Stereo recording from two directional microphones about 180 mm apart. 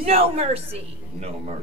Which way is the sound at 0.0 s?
35° right (ahead or behind).